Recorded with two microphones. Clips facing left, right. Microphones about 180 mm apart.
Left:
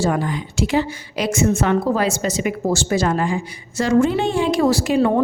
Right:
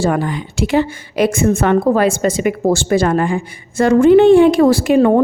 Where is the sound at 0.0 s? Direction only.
60° right (ahead or behind).